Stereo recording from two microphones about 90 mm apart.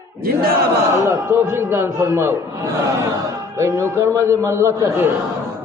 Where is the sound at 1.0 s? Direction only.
25° right (ahead or behind).